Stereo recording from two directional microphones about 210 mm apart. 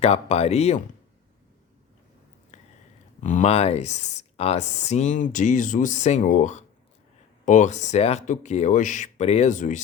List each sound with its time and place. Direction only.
0.0 s speech: 30° left (ahead or behind)
2.5 s a sound: 35° left (ahead or behind)
3.2 s speech: 35° left (ahead or behind)